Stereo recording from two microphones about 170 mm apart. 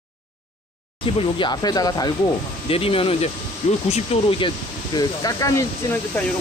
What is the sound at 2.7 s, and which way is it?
Speech, 35° left (ahead or behind).